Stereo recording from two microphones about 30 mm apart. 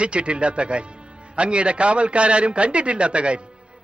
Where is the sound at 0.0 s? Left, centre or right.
Right.